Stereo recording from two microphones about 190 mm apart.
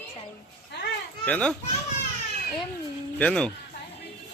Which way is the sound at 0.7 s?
65° left (ahead or behind).